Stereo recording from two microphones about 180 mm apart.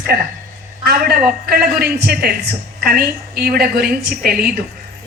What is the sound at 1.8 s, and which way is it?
A woman's voice, 60° right (ahead or behind).